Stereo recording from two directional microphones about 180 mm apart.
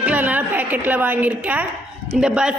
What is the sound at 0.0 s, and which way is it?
A woman's voice, 10° right (ahead or behind).